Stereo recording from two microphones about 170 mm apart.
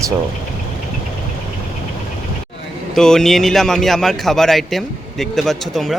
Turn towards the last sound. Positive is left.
turn(degrees=0)  # may be behind; listen again after turning